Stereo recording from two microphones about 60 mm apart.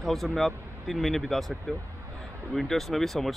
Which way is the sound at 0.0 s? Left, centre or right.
Centre.